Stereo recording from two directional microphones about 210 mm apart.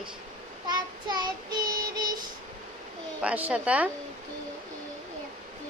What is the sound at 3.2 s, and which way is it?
Speech, 5° right (ahead or behind).